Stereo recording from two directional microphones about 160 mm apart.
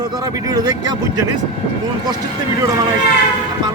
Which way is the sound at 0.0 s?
25° right (ahead or behind).